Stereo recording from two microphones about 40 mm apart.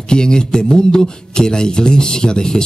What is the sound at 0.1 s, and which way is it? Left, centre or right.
Speech, centre.